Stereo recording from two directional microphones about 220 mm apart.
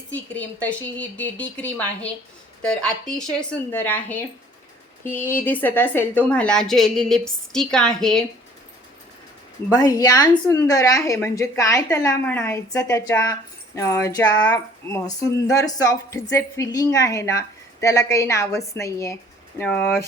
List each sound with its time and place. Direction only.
0.1 s a woman's voice: 5° left (ahead or behind)
9.6 s speech: 15° left (ahead or behind)